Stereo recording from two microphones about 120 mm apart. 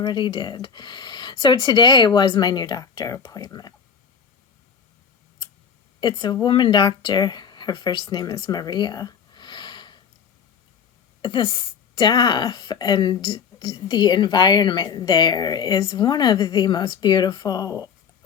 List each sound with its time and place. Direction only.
0.0 s speech: 40° left (ahead or behind)
6.0 s speech: 40° left (ahead or behind)
11.2 s speech: 40° left (ahead or behind)